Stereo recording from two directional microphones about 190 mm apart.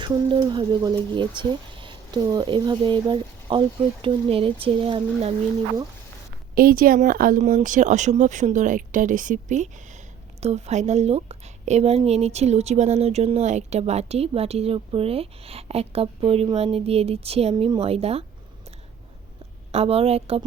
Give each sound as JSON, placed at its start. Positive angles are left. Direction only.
{"t": 0.0, "sound": "speech", "side_deg": -25}
{"t": 6.5, "sound": "a woman's voice", "side_deg": -50}
{"t": 19.7, "sound": "a woman's voice", "side_deg": -30}